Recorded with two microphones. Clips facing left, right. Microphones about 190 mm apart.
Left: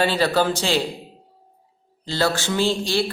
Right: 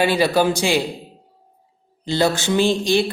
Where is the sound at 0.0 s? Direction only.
15° right (ahead or behind).